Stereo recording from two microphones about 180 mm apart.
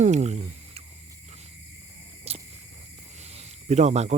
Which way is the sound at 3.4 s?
40° right (ahead or behind).